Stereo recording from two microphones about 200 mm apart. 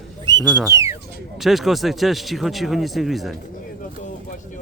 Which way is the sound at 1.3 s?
Centre (ahead or behind).